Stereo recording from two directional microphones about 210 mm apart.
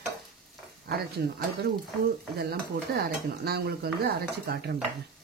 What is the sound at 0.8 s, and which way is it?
Speech, 50° right (ahead or behind).